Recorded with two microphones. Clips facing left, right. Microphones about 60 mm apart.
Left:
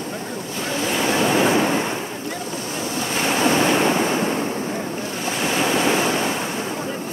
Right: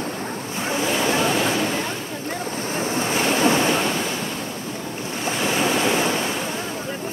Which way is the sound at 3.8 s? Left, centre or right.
Left.